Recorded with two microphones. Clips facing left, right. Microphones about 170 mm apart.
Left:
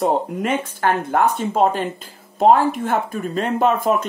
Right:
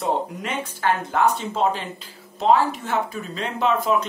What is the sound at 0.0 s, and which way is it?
Speech, 50° left (ahead or behind).